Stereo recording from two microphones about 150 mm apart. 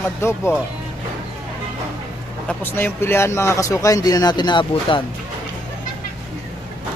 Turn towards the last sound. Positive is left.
turn(degrees=30)  # may be behind; listen again after turning